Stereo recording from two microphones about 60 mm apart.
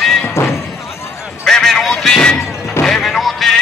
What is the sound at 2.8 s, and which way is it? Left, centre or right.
Music, centre.